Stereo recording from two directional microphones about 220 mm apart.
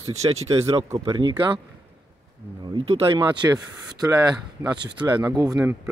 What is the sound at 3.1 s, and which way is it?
Speech, 20° right (ahead or behind).